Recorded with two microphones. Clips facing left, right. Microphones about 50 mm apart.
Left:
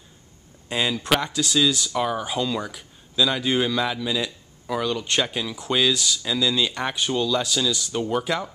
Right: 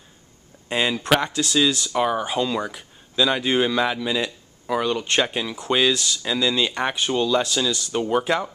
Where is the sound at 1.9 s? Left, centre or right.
Centre.